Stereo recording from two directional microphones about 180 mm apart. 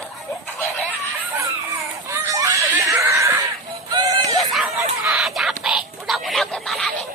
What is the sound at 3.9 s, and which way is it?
Music, 25° right (ahead or behind).